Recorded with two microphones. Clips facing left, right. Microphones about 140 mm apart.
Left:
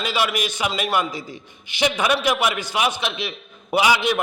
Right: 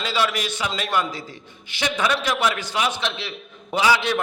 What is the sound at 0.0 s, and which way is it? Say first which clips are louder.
A man's voice: left 1 dB; 15° left (ahead or behind).